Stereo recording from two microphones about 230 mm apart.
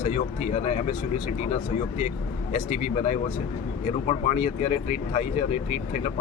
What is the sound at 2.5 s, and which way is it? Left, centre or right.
Speech, left.